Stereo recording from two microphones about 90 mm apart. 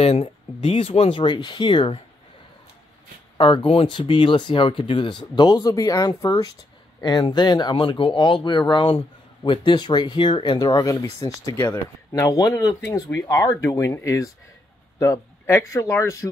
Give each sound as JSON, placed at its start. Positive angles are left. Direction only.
{"t": 0.2, "sound": "speech", "side_deg": 90}
{"t": 3.3, "sound": "speech", "side_deg": 70}
{"t": 5.3, "sound": "speech", "side_deg": 50}
{"t": 9.7, "sound": "speech", "side_deg": 50}
{"t": 15.0, "sound": "a sound", "side_deg": 35}
{"t": 15.7, "sound": "speech", "side_deg": 35}